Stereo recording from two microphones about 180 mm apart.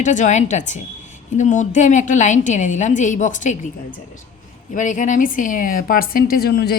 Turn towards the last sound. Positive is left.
turn(degrees=60)  # may be behind; listen again after turning